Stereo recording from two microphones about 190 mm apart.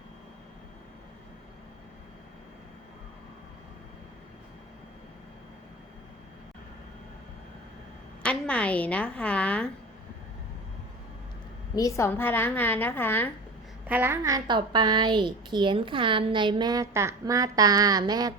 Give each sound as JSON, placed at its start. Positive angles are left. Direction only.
{"t": 8.2, "sound": "a woman's voice", "side_deg": 5}
{"t": 11.7, "sound": "a woman's voice", "side_deg": 15}
{"t": 13.8, "sound": "a woman's voice", "side_deg": -10}